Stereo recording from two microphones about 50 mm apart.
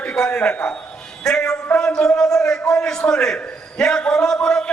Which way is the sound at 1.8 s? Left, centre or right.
Centre.